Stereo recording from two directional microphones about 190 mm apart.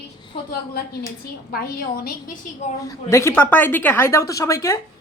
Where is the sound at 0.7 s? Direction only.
50° left (ahead or behind).